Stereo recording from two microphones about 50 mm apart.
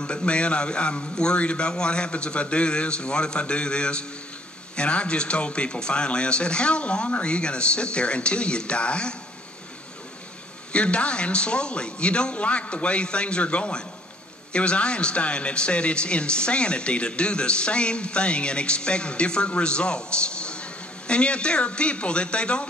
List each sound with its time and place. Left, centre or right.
0.0 s speech: left
10.7 s speech: left